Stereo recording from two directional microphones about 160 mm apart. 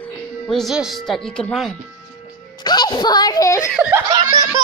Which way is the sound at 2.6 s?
25° left (ahead or behind).